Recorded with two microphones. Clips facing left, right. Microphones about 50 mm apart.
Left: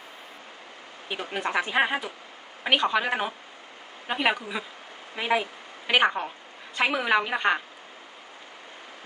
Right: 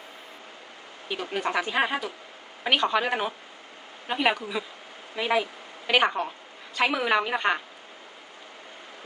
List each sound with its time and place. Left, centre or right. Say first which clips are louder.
1.0 s a woman's voice: right 1 dB; centre